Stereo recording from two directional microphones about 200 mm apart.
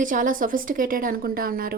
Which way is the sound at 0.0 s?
40° right (ahead or behind).